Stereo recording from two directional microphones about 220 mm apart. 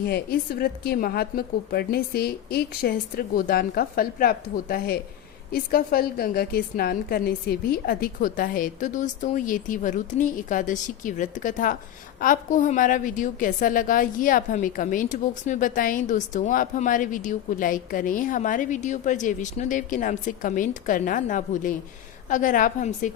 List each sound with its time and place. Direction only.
0.0 s a woman's voice: 45° left (ahead or behind)